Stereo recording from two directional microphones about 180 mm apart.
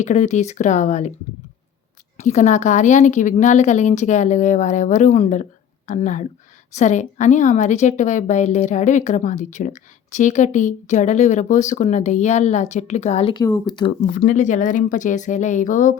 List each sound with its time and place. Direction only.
0.0 s a woman's voice: 40° left (ahead or behind)
2.1 s a woman's voice: 40° left (ahead or behind)
13.4 s speech: 20° left (ahead or behind)
14.2 s speech: 45° left (ahead or behind)